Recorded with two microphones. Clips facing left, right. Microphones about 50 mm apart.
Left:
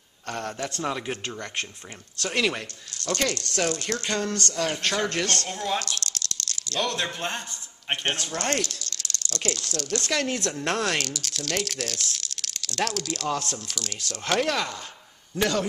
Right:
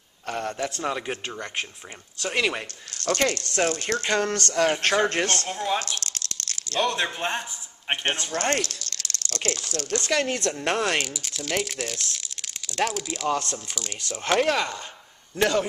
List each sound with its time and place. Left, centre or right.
0.3 s speech: centre
3.0 s speech: right
5.5 s speech: centre
5.8 s a sound: right
6.8 s speech: centre
8.6 s speech: right
9.9 s speech: centre